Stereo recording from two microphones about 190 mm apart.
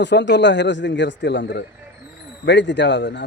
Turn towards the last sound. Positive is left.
turn(degrees=65)  # may be behind; listen again after turning